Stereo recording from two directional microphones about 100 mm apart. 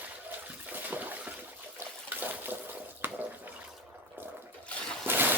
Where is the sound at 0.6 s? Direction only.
15° right (ahead or behind).